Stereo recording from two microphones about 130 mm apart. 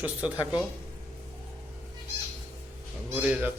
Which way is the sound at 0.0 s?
10° right (ahead or behind).